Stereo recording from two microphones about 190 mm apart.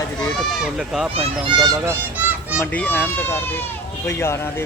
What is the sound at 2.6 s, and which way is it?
Speech, 5° left (ahead or behind).